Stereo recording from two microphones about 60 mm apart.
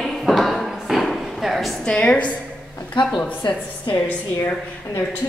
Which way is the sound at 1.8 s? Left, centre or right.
Centre.